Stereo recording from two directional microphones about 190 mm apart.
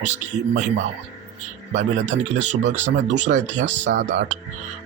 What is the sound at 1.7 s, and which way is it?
Speech, 40° right (ahead or behind).